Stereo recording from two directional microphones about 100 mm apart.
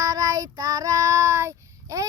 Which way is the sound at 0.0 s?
40° right (ahead or behind).